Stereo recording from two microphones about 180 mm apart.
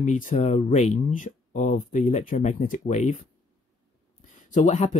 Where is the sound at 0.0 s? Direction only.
45° left (ahead or behind).